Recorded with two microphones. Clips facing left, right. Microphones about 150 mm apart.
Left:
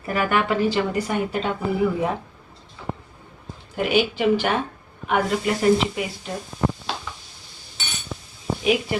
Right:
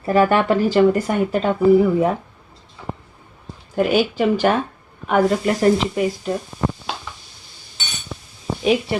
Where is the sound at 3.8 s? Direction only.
40° right (ahead or behind).